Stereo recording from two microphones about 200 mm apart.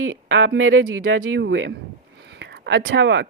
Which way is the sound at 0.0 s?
85° right.